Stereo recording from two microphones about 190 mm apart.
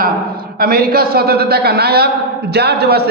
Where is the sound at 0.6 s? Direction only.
50° right (ahead or behind).